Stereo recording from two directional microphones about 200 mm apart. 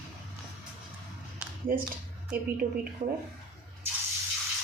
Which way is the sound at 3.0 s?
30° right (ahead or behind).